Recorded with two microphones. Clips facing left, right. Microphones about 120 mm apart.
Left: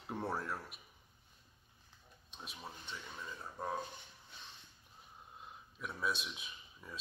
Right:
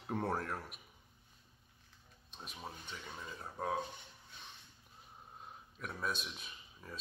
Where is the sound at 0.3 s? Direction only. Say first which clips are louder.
Right 2 dB; 50° right (ahead or behind).